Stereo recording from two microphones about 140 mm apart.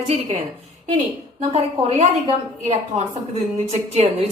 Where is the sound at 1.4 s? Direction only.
45° right (ahead or behind).